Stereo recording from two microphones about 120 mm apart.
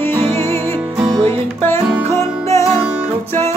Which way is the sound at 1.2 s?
20° left (ahead or behind).